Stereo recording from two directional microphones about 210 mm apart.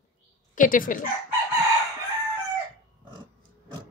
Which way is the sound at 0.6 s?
40° left (ahead or behind).